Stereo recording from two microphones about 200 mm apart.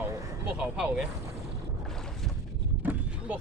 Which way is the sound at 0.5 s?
5° right (ahead or behind).